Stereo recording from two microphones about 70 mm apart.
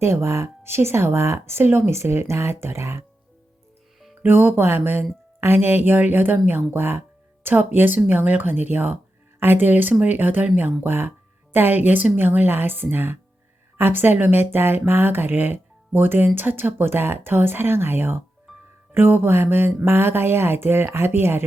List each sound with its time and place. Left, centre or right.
0.0 s speech: right
4.2 s speech: right